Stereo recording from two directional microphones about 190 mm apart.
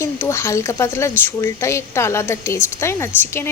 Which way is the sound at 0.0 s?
15° left (ahead or behind).